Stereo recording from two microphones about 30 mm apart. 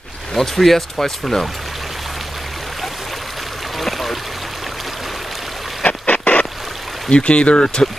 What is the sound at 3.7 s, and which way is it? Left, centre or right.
Stream, centre.